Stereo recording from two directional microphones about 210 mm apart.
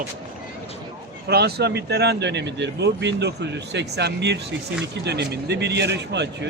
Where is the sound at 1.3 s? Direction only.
50° right (ahead or behind).